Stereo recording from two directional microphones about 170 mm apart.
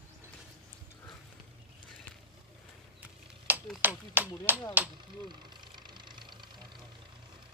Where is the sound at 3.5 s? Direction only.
10° right (ahead or behind).